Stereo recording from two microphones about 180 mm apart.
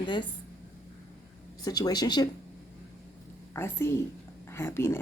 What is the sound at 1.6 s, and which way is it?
Speech, 20° left (ahead or behind).